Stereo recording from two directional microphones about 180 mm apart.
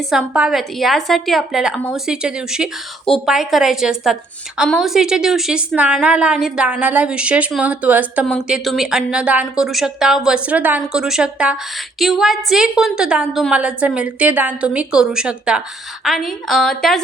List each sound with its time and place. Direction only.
0.1 s a woman's voice: 5° right (ahead or behind)